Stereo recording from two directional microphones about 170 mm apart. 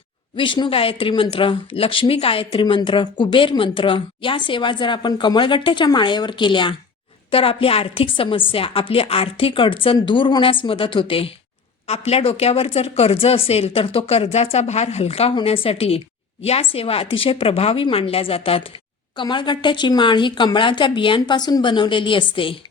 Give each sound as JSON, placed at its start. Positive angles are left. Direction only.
{"t": 0.3, "sound": "a woman's voice", "side_deg": 30}